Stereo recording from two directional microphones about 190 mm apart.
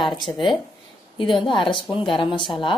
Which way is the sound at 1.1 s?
25° left (ahead or behind).